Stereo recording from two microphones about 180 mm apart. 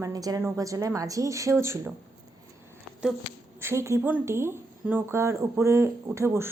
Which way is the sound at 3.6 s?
15° right (ahead or behind).